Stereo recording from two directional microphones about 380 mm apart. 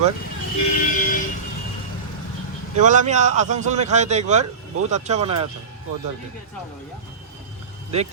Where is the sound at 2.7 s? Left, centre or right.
Centre.